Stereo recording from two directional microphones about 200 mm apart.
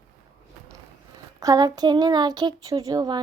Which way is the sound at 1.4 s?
20° right (ahead or behind).